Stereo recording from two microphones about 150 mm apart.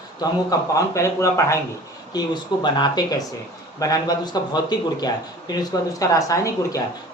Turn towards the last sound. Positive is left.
turn(degrees=20)  # may be behind; listen again after turning